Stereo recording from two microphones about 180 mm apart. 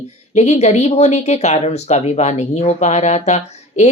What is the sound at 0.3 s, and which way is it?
Speech, 40° left (ahead or behind).